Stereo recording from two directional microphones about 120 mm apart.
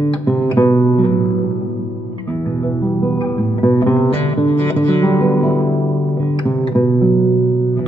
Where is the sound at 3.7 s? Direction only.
20° left (ahead or behind).